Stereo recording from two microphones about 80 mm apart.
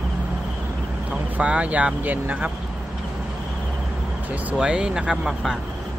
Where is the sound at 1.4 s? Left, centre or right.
Centre.